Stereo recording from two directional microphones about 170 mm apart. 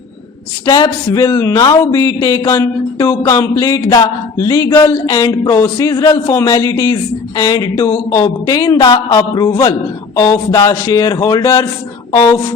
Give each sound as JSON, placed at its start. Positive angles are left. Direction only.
{"t": 0.6, "sound": "speech", "side_deg": 20}